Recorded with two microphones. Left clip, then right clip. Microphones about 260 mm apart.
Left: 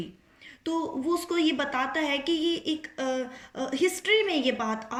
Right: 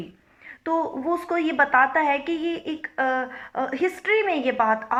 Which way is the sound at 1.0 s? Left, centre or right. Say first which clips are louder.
Right 2 dB; centre.